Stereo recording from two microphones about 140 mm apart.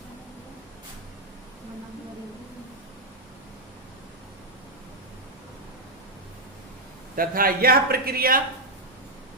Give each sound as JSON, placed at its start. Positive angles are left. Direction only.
{"t": 7.2, "sound": "speech", "side_deg": -90}